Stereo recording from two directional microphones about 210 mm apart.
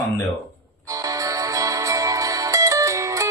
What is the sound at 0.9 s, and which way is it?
Music, 15° right (ahead or behind).